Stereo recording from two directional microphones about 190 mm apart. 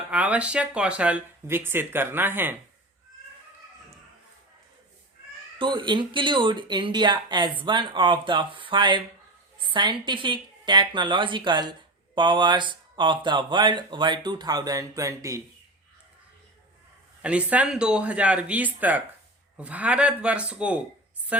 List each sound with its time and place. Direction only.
0.1 s speech: 5° right (ahead or behind)
5.5 s speech: 25° right (ahead or behind)
17.2 s speech: 5° right (ahead or behind)